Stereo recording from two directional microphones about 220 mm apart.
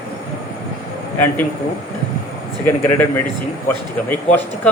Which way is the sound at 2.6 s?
10° left (ahead or behind).